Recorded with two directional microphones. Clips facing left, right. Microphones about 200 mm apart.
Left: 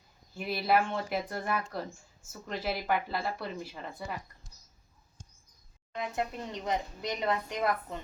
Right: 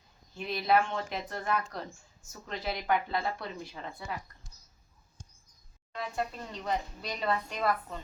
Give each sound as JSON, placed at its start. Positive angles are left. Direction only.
{"t": 0.3, "sound": "a woman's voice", "side_deg": 5}
{"t": 5.9, "sound": "a woman's voice", "side_deg": 20}